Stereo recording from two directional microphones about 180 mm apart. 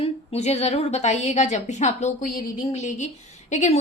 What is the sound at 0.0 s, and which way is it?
A woman's voice, 35° left (ahead or behind).